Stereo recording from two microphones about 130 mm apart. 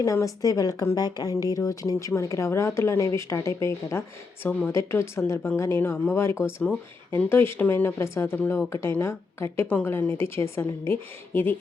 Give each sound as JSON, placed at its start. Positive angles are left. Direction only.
{"t": 0.0, "sound": "speech", "side_deg": 25}